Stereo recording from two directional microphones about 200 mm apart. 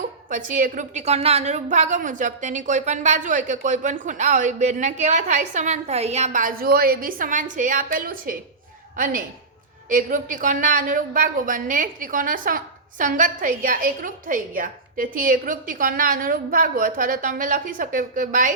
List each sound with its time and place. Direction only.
0.3 s a woman's voice: 40° right (ahead or behind)
9.9 s a woman's voice: 40° right (ahead or behind)